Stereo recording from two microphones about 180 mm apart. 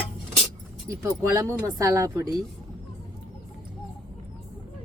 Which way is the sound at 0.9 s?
15° right (ahead or behind).